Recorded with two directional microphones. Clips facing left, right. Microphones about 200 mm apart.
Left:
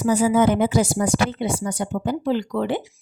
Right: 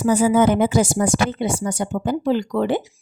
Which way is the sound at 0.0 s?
50° right (ahead or behind).